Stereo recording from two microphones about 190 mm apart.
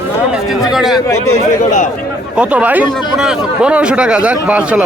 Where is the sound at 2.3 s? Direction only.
5° right (ahead or behind).